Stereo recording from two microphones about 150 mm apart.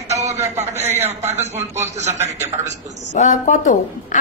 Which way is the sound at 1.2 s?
50° right (ahead or behind).